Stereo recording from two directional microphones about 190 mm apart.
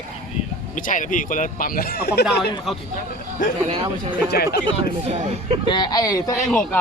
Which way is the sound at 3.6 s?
30° right (ahead or behind).